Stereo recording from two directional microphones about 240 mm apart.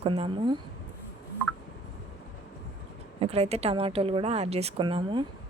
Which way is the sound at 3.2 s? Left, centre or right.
Right.